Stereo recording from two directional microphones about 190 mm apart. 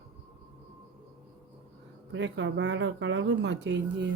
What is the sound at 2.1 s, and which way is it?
Speech, 70° right (ahead or behind).